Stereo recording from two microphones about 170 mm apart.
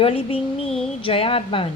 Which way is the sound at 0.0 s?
35° left (ahead or behind).